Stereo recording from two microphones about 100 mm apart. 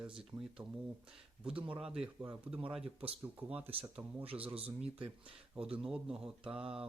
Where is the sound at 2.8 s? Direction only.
75° right (ahead or behind).